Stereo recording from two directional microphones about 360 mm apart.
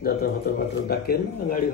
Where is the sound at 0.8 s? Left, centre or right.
Left.